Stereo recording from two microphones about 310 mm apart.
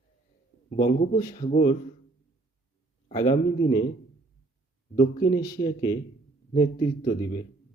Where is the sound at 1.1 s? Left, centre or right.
Centre.